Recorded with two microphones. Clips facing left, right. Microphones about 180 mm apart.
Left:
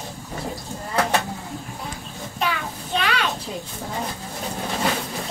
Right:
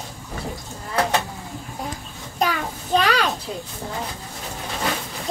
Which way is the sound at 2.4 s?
40° right (ahead or behind).